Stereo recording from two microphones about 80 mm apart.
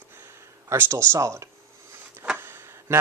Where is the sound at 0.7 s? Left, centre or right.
Right.